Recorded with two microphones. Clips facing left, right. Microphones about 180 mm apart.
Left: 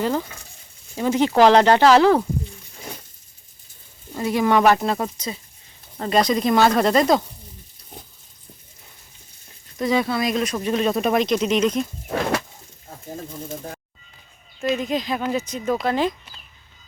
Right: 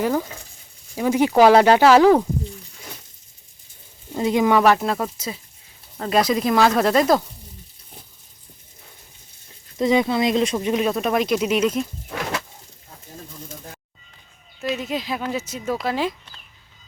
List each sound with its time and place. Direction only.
0.0 s speech: 10° right (ahead or behind)
4.1 s speech: 20° right (ahead or behind)
4.4 s speech: 5° right (ahead or behind)
9.7 s speech: 20° right (ahead or behind)
10.8 s speech: centre (ahead or behind)
14.6 s speech: 5° right (ahead or behind)